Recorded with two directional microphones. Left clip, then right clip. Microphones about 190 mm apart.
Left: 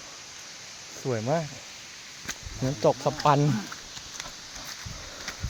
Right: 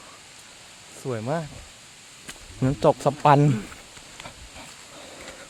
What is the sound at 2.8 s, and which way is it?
Speech, 60° right (ahead or behind).